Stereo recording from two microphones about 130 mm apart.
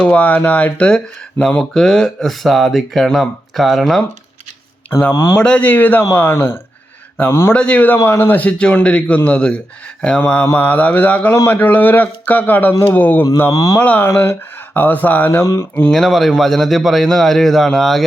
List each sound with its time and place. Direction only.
0.0 s speech: 10° left (ahead or behind)
4.9 s speech: 20° left (ahead or behind)
5.4 s speech: 10° left (ahead or behind)
13.7 s speech: 15° left (ahead or behind)
15.7 s speech: 5° left (ahead or behind)